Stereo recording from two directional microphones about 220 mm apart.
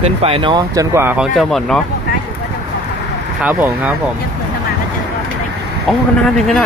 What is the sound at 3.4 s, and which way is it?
Speech, 5° right (ahead or behind).